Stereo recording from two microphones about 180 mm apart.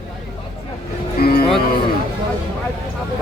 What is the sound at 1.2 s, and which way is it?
Music, 60° left (ahead or behind).